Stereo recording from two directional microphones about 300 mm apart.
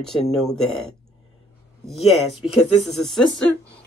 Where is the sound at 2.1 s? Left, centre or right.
Centre.